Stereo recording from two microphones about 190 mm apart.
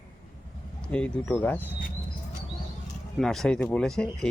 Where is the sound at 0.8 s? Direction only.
5° left (ahead or behind).